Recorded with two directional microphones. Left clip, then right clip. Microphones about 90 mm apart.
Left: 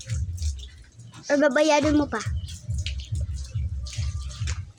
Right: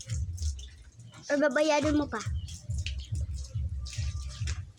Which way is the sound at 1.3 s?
25° left (ahead or behind).